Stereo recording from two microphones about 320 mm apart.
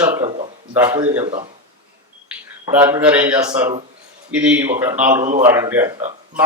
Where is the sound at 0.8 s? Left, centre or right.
Centre.